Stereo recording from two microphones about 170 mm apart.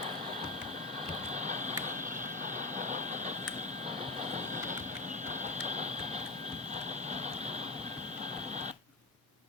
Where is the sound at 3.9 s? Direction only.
40° right (ahead or behind).